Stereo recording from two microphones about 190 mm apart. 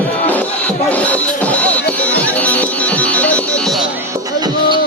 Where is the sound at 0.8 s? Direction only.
10° left (ahead or behind).